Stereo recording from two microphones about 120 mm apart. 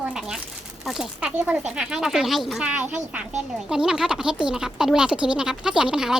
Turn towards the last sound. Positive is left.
turn(degrees=-5)  # may be behind; listen again after turning